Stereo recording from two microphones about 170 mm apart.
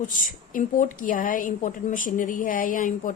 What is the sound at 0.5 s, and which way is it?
Speech, 50° left (ahead or behind).